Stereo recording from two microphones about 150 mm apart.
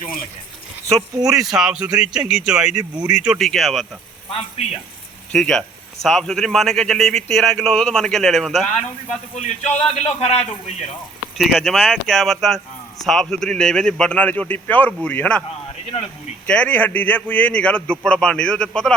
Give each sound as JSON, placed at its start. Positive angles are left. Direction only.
{"t": 0.9, "sound": "speech", "side_deg": -20}
{"t": 1.5, "sound": "speech", "side_deg": -5}
{"t": 4.3, "sound": "a man's voice", "side_deg": 40}
{"t": 5.3, "sound": "speech", "side_deg": 5}
{"t": 8.6, "sound": "a man's voice", "side_deg": 50}
{"t": 11.3, "sound": "speech", "side_deg": 0}
{"t": 16.5, "sound": "a man's voice", "side_deg": 10}